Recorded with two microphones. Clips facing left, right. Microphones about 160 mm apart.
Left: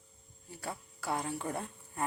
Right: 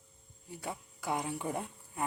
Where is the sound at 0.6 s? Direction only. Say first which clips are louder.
Even; 15° right (ahead or behind).